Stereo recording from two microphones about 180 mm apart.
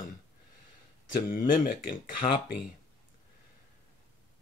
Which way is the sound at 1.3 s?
50° left (ahead or behind).